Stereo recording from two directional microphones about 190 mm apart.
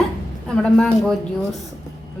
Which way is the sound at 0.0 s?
5° left (ahead or behind).